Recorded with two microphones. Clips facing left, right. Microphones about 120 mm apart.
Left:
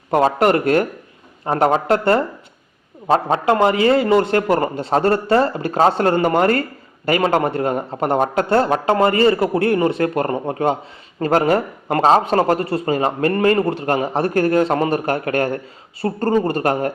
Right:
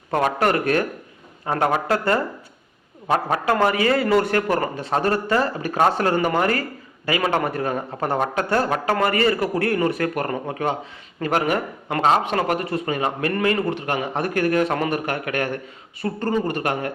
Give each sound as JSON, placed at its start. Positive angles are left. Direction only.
{"t": 0.1, "sound": "a man's voice", "side_deg": 25}